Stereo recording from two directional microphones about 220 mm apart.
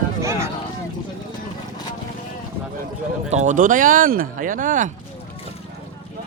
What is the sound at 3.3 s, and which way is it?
Speech, 35° right (ahead or behind).